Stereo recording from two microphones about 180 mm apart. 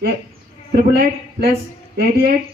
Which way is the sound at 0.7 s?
60° right (ahead or behind).